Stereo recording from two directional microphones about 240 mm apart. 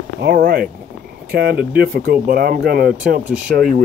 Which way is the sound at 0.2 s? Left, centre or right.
Right.